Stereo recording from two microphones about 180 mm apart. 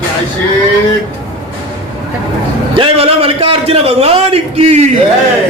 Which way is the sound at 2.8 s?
30° right (ahead or behind).